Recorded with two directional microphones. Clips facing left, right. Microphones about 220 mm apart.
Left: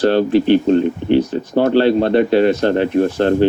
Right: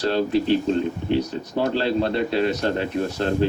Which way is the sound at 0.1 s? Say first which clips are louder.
Left 7 dB; 70° left (ahead or behind).